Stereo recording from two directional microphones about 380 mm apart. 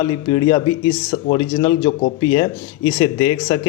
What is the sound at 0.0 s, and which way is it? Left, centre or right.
Speech, centre.